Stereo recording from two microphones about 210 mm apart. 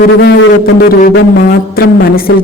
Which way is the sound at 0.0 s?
50° left (ahead or behind).